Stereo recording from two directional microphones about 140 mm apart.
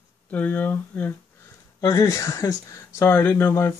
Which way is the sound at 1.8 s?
20° left (ahead or behind).